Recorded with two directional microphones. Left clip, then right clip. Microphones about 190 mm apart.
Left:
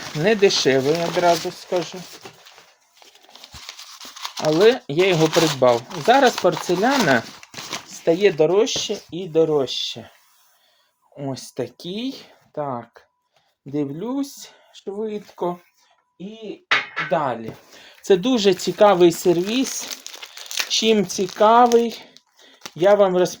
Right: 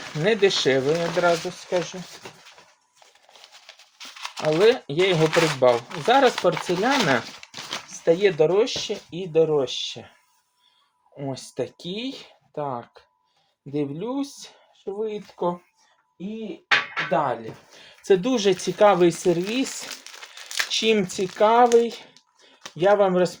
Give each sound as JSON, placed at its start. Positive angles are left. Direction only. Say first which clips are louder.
{"t": 0.2, "sound": "speech", "louder": "left 3 dB", "side_deg": 55}
{"t": 0.9, "sound": "speech", "louder": "left 2 dB", "side_deg": 30}
{"t": 1.2, "sound": "speech", "louder": "left 3 dB", "side_deg": 45}
{"t": 4.1, "sound": "a sound", "louder": "left 3 dB", "side_deg": 25}
{"t": 4.6, "sound": "speech", "louder": "left 3 dB", "side_deg": 50}
{"t": 5.1, "sound": "speech", "louder": "left 2 dB", "side_deg": 30}
{"t": 6.1, "sound": "speech", "louder": "left 3 dB", "side_deg": 45}
{"t": 6.5, "sound": "speech", "louder": "left 3 dB", "side_deg": 25}
{"t": 7.4, "sound": "a sound", "louder": "left 2 dB", "side_deg": 20}
{"t": 8.0, "sound": "speech", "louder": "left 2 dB", "side_deg": 50}
{"t": 11.2, "sound": "speech", "louder": "left 2 dB", "side_deg": 45}
{"t": 17.1, "sound": "speech", "louder": "left 2 dB", "side_deg": 55}
{"t": 17.7, "sound": "speech", "louder": "left 2 dB", "side_deg": 45}
{"t": 20.7, "sound": "speech", "louder": "left 3 dB", "side_deg": 45}